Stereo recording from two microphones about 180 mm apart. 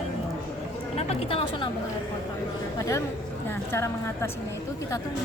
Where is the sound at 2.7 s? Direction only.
20° left (ahead or behind).